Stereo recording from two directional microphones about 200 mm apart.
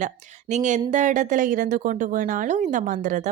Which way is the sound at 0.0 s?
35° right (ahead or behind).